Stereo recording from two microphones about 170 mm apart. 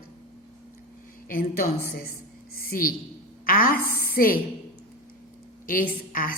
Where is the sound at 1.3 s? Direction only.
55° left (ahead or behind).